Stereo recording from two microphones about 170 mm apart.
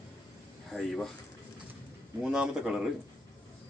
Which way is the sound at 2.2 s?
5° right (ahead or behind).